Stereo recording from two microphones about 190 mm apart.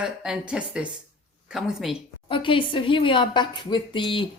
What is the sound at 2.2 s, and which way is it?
A woman's voice, 25° left (ahead or behind).